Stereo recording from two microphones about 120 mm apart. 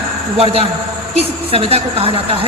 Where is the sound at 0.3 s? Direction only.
50° right (ahead or behind).